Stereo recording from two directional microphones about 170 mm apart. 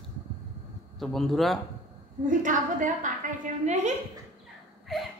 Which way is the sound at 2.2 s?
50° right (ahead or behind).